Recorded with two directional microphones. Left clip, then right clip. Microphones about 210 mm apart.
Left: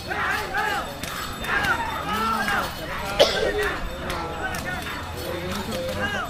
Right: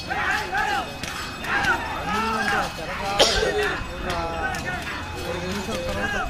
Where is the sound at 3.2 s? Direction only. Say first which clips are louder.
Even; 50° right (ahead or behind).